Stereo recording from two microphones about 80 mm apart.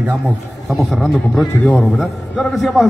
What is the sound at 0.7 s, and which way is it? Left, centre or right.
Speech, centre.